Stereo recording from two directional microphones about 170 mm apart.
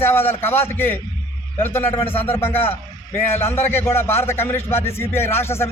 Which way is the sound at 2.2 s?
15° left (ahead or behind).